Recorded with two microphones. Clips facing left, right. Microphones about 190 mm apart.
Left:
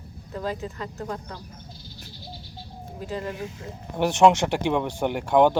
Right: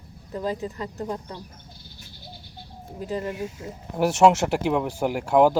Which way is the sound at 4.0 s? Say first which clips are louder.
Even; 5° right (ahead or behind).